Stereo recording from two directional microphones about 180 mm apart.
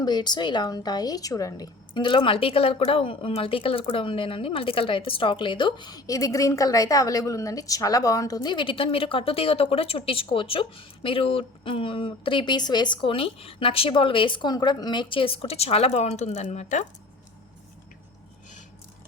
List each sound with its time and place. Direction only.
0.0 s a woman's voice: 25° left (ahead or behind); by 16.8 s 40° left (ahead or behind)